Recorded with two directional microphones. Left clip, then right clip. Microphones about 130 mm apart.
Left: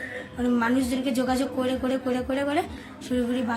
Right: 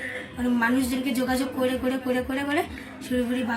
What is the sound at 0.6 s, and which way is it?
A woman's voice, 15° left (ahead or behind).